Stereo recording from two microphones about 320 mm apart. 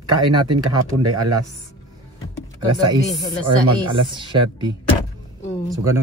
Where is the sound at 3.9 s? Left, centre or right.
Centre.